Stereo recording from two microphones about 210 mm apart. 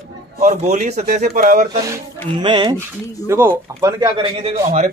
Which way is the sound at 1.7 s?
15° right (ahead or behind).